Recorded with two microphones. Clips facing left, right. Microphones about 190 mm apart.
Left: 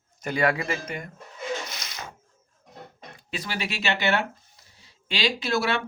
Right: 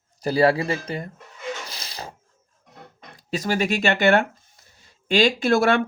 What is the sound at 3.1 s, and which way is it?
Speech, 40° right (ahead or behind).